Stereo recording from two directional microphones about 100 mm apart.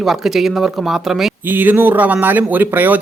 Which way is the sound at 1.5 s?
20° right (ahead or behind).